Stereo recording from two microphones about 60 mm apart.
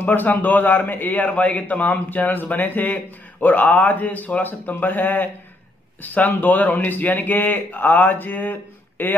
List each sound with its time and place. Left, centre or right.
0.0 s a man's voice: left